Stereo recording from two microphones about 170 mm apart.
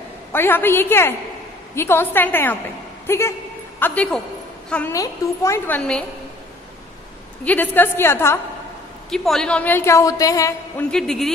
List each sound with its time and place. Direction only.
0.3 s a woman's voice: 10° left (ahead or behind)
4.9 s a woman's voice: 20° left (ahead or behind)
5.8 s a man's voice: 5° left (ahead or behind)
7.4 s a woman's voice: 10° left (ahead or behind)
9.1 s a woman's voice: centre (ahead or behind); by 10.5 s 20° left (ahead or behind)
10.9 s a man's voice: 5° left (ahead or behind)